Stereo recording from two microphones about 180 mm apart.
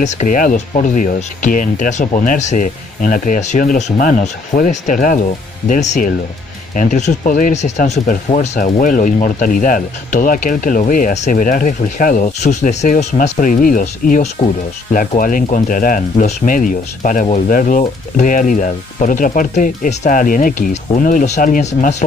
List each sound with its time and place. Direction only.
0.0 s speech: 40° left (ahead or behind)